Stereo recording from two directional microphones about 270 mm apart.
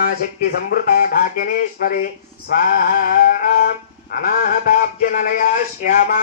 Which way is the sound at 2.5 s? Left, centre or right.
Left.